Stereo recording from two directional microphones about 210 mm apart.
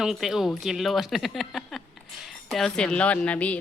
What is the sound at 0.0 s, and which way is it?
Speech, centre (ahead or behind).